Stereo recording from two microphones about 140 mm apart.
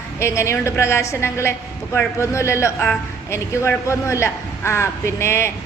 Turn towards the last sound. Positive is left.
turn(degrees=20)  # may be behind; listen again after turning